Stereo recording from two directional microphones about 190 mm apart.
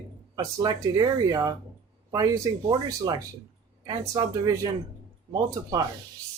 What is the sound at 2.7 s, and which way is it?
Speech, 20° right (ahead or behind).